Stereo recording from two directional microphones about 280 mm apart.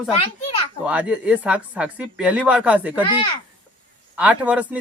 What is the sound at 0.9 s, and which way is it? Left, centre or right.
Speech, centre.